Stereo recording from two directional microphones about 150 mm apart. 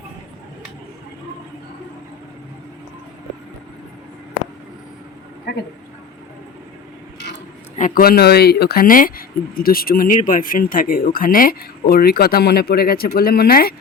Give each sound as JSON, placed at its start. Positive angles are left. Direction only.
{"t": 7.8, "sound": "speech", "side_deg": 70}